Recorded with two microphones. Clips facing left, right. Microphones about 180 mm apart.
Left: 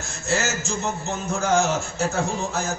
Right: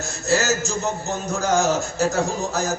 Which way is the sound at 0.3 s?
35° right (ahead or behind).